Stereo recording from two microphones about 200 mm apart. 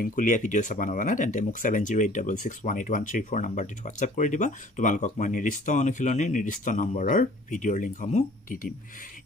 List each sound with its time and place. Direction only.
0.0 s speech: 40° left (ahead or behind)